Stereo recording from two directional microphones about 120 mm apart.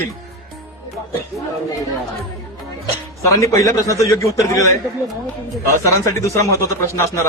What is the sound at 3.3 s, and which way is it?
A man's voice, 25° left (ahead or behind).